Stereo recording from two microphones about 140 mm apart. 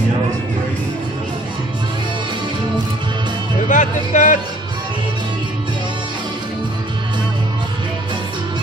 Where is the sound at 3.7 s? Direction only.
65° left (ahead or behind).